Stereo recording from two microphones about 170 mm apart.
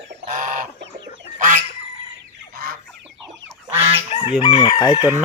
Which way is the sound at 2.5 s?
60° right (ahead or behind).